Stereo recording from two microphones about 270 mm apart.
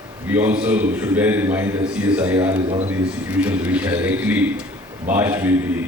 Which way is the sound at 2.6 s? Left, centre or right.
Right.